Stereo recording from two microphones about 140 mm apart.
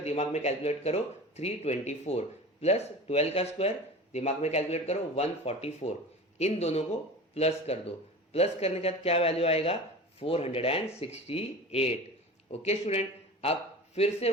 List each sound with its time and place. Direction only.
0.0 s a man's voice: 50° left (ahead or behind)